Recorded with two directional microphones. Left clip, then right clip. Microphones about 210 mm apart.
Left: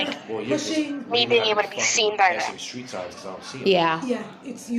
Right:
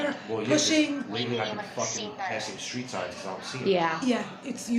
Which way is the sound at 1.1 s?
45° left (ahead or behind).